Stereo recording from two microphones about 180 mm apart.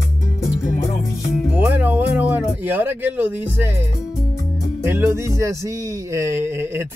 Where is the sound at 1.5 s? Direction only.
10° right (ahead or behind).